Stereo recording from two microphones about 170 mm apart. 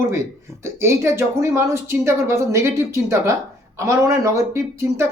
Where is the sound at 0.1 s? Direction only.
15° right (ahead or behind).